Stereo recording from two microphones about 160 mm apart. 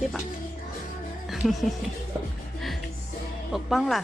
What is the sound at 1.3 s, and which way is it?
Music, centre (ahead or behind).